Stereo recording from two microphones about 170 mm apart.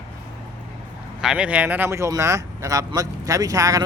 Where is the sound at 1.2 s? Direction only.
5° right (ahead or behind); by 3.9 s 20° right (ahead or behind).